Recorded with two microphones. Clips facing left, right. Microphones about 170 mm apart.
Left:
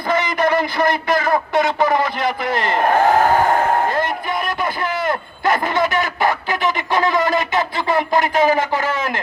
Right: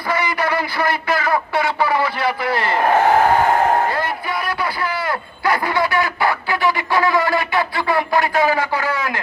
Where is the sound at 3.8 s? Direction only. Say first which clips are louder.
Left 2 dB; 20° left (ahead or behind).